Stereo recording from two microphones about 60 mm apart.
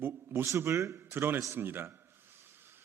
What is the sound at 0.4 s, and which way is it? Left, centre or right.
Speech, right.